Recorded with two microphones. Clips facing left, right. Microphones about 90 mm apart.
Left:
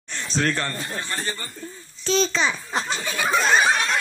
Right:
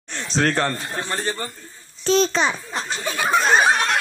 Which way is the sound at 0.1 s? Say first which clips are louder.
Right 3 dB; 70° right (ahead or behind).